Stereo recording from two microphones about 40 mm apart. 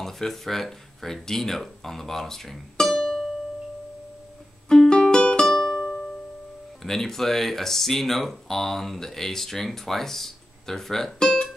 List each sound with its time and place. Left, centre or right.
0.0 s speech: centre
4.6 s music: centre
6.8 s speech: centre